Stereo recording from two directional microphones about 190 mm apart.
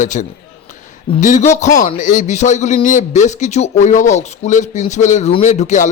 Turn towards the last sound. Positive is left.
turn(degrees=40)  # may be behind; listen again after turning